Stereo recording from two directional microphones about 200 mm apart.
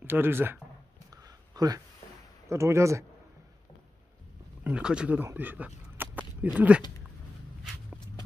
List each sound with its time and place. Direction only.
0.0 s speech: 10° right (ahead or behind)
1.1 s a sound: 20° right (ahead or behind)
2.4 s speech: 15° right (ahead or behind)
4.6 s speech: 5° right (ahead or behind)